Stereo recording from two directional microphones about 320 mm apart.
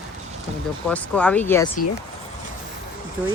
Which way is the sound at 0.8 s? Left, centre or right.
Centre.